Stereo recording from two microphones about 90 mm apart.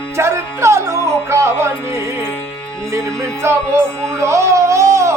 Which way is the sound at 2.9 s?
30° right (ahead or behind).